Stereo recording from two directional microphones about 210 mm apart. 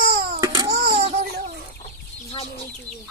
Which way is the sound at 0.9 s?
30° right (ahead or behind).